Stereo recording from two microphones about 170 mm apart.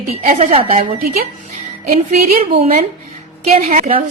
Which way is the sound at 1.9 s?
45° right (ahead or behind).